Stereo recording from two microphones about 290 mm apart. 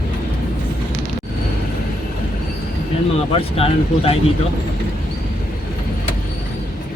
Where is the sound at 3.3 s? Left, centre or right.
Centre.